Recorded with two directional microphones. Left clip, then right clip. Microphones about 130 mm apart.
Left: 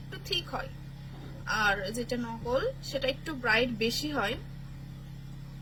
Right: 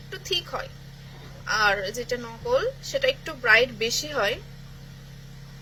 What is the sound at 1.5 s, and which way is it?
A woman's voice, 35° left (ahead or behind).